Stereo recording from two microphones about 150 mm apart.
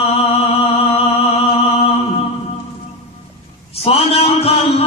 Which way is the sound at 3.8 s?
40° left (ahead or behind).